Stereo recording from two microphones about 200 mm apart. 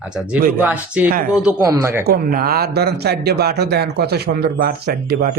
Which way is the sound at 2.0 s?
50° right (ahead or behind).